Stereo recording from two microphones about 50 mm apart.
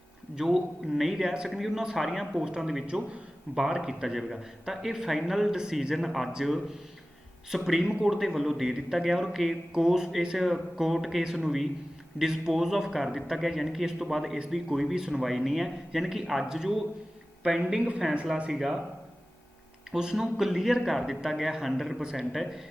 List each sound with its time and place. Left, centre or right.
0.3 s a man's voice: centre
7.5 s a man's voice: centre
17.7 s a woman's voice: right
19.9 s speech: centre
22.0 s speech: centre
22.3 s a man's voice: centre